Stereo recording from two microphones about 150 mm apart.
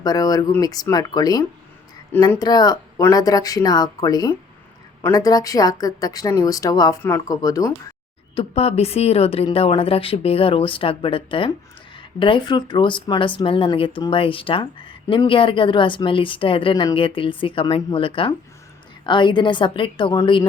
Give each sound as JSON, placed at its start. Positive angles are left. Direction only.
{"t": 0.0, "sound": "speech", "side_deg": 25}
{"t": 8.4, "sound": "a woman's voice", "side_deg": 45}